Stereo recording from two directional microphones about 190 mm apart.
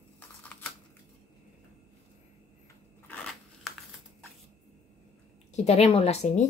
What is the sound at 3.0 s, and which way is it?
Scissors, 5° left (ahead or behind).